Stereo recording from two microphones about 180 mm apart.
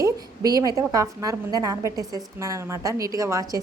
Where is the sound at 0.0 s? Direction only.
20° right (ahead or behind).